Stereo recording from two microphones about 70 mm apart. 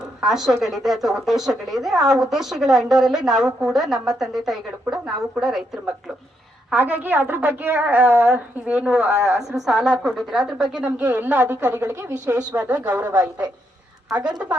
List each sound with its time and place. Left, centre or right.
0.2 s a woman's voice: centre
6.7 s a woman's voice: right
8.6 s a woman's voice: centre
8.9 s a woman's voice: centre
9.1 s a woman's voice: right
9.5 s a woman's voice: centre
11.1 s a woman's voice: right
12.5 s a woman's voice: centre